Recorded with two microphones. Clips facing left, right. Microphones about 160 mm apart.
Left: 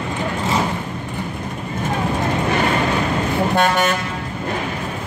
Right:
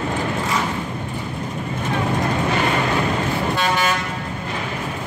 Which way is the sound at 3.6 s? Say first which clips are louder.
Left 5 dB; 55° left (ahead or behind).